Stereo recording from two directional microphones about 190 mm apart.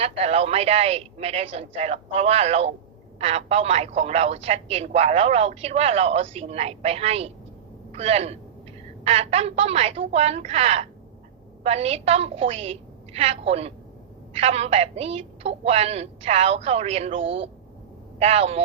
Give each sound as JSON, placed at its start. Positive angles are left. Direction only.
{"t": 0.0, "sound": "speech", "side_deg": -30}